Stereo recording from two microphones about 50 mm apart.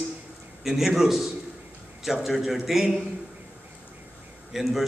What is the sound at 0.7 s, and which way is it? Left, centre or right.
A man's voice, centre.